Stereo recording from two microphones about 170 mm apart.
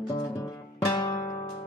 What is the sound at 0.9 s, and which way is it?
Music, 25° left (ahead or behind).